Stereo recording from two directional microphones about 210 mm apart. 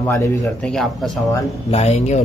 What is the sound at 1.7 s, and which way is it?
Speech, 30° left (ahead or behind).